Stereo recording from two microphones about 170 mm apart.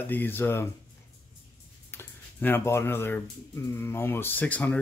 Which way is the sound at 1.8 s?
15° left (ahead or behind).